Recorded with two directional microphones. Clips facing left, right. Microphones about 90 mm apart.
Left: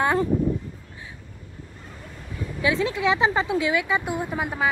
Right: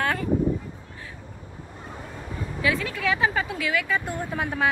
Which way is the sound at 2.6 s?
25° left (ahead or behind).